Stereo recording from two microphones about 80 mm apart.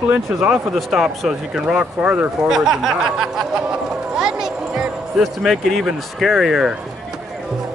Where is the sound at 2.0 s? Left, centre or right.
Right.